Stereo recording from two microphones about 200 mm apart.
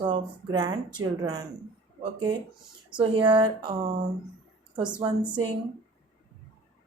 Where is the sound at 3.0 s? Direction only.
25° right (ahead or behind).